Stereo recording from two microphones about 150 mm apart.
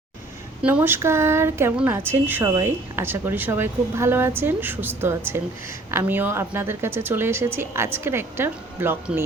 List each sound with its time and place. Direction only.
0.6 s a woman's voice: 10° right (ahead or behind)